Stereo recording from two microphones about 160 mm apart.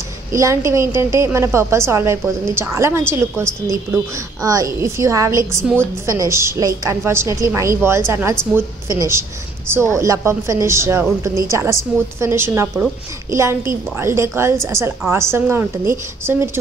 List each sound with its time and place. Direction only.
0.3 s a woman's voice: 20° right (ahead or behind)
5.6 s a woman's voice: 5° left (ahead or behind)
6.0 s a woman's voice: 20° right (ahead or behind)